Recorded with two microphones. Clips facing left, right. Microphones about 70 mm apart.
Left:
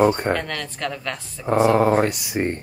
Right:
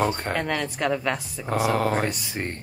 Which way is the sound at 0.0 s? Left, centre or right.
Centre.